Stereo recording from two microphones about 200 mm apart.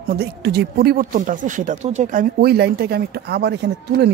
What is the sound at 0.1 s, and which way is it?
Speech, 55° right (ahead or behind).